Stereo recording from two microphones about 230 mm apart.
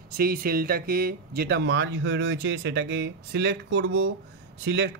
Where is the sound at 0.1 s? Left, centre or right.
Right.